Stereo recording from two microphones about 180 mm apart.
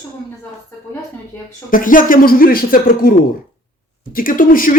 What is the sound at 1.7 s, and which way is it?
A man's voice, 50° left (ahead or behind).